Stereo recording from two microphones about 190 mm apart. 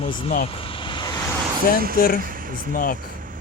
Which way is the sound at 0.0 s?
30° left (ahead or behind).